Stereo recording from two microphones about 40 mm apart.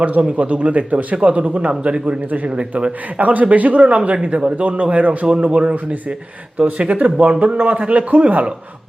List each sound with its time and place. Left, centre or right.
0.0 s a man's voice: right
2.2 s speech: right
2.5 s a man's voice: right
3.2 s a man's voice: right